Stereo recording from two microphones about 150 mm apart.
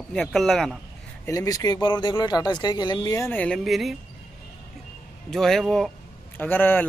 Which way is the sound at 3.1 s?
15° left (ahead or behind).